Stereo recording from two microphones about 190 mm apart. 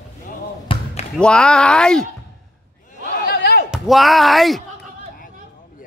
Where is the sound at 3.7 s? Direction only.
Centre (ahead or behind).